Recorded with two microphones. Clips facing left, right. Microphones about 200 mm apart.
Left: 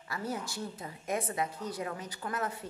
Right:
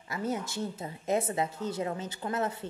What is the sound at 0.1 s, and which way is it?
A woman's voice, 20° right (ahead or behind).